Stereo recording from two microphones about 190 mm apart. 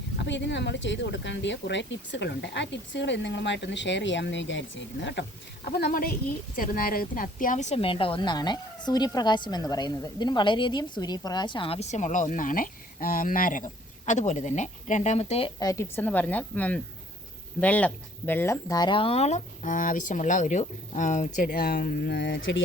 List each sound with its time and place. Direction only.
0.2 s speech: 70° left (ahead or behind)
5.6 s a woman's voice: 55° left (ahead or behind); by 22.6 s 80° left